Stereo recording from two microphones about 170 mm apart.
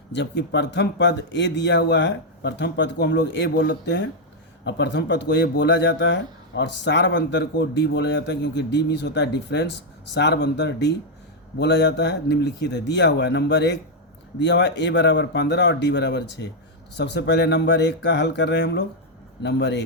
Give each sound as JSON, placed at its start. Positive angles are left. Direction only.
{"t": 0.1, "sound": "speech", "side_deg": 90}